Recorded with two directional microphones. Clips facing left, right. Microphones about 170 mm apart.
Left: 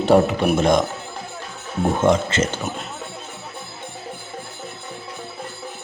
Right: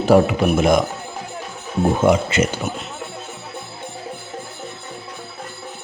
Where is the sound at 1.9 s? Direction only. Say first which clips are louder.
Right 1 dB; 10° right (ahead or behind).